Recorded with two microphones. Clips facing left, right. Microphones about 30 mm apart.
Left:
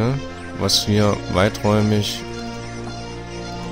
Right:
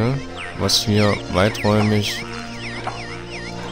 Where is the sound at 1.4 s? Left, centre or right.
Right.